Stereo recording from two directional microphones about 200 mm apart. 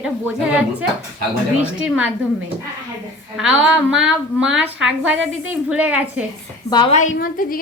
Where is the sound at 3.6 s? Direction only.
5° right (ahead or behind).